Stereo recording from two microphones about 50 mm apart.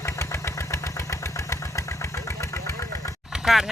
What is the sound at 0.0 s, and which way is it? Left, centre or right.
Engine, left.